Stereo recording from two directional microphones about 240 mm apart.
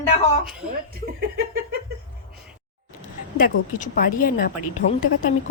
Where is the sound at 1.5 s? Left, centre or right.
Right.